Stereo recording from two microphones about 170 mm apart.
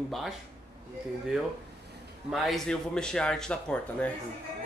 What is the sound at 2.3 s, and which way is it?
Speech, centre (ahead or behind).